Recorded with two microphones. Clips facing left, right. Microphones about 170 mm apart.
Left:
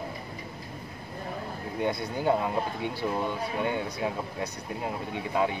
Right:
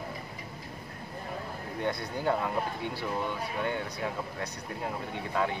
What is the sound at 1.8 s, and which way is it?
Speech, 15° left (ahead or behind).